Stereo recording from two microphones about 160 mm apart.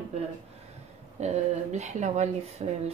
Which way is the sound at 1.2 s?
45° right (ahead or behind).